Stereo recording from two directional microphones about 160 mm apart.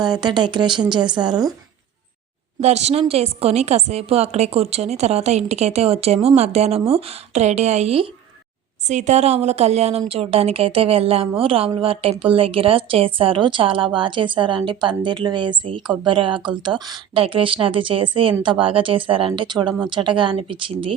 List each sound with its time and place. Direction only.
0.0 s speech: 25° right (ahead or behind)
2.6 s a woman's voice: 45° right (ahead or behind)
8.8 s a woman's voice: 50° right (ahead or behind); by 20.9 s 30° right (ahead or behind)